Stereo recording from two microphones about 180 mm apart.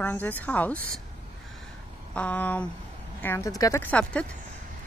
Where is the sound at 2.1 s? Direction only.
5° left (ahead or behind).